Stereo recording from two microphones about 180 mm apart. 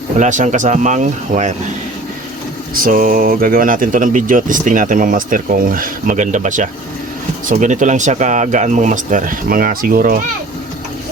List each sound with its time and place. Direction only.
0.2 s speech: 45° right (ahead or behind)
2.7 s speech: 50° right (ahead or behind)